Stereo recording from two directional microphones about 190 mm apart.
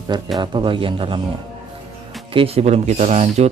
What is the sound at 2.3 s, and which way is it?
Speech, 30° right (ahead or behind).